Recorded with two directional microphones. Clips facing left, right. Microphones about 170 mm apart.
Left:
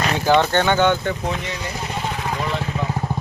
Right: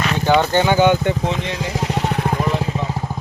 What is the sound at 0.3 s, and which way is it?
Speech, 5° right (ahead or behind).